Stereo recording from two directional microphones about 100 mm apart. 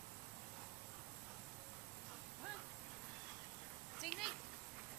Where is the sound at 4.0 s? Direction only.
Centre (ahead or behind).